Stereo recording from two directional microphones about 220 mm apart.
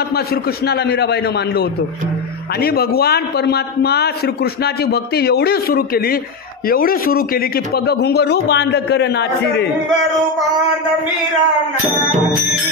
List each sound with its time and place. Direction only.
0.1 s a man's voice: 45° left (ahead or behind)